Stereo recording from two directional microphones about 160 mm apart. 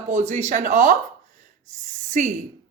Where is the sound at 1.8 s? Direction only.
50° right (ahead or behind).